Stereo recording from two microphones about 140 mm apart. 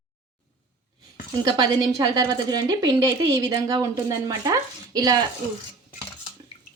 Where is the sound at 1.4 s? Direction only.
30° right (ahead or behind).